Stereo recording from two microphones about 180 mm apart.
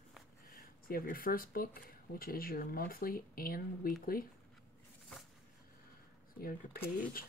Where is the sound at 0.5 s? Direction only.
55° left (ahead or behind).